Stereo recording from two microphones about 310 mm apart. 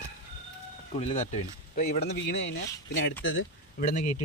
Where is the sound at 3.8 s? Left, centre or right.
Left.